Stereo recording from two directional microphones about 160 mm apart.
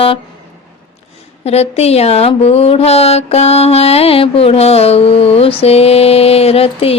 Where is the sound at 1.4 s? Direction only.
40° left (ahead or behind).